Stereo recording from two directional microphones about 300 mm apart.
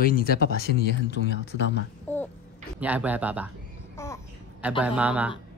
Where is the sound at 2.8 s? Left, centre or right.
Centre.